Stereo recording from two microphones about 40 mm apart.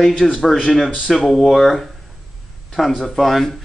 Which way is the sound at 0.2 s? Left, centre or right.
Centre.